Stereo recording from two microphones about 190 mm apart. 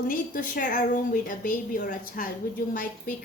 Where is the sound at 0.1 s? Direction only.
45° left (ahead or behind).